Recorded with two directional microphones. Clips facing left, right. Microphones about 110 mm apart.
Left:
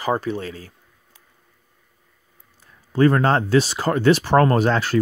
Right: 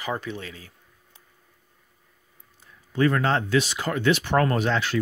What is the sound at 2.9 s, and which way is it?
Speech, 40° left (ahead or behind).